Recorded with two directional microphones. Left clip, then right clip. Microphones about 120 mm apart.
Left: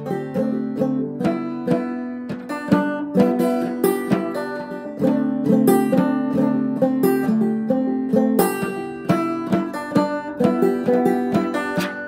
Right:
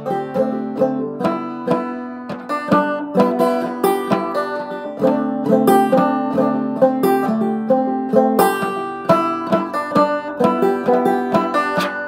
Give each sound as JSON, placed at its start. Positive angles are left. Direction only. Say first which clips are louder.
{"t": 0.1, "sound": "music", "louder": "right 5 dB", "side_deg": -50}
{"t": 2.9, "sound": "music", "louder": "right 3 dB", "side_deg": -45}